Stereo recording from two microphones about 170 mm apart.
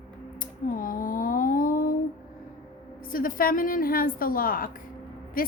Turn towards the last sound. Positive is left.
turn(degrees=55)  # may be behind; listen again after turning